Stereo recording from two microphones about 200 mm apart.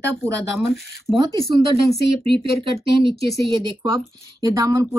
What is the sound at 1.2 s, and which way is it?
Speech, 30° right (ahead or behind).